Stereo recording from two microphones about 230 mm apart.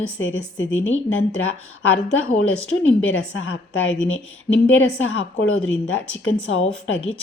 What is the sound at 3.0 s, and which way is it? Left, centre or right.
Speech, left.